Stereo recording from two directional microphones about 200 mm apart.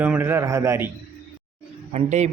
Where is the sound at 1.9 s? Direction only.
35° right (ahead or behind).